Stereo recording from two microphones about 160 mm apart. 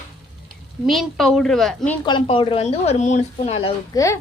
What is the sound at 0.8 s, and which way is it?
A woman's voice, centre (ahead or behind).